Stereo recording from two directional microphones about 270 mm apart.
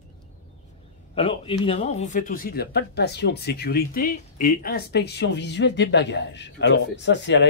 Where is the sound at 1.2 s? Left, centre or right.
Centre; by 7.5 s left.